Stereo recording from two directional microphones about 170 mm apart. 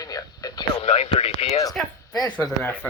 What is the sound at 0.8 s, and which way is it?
Speech, 35° left (ahead or behind).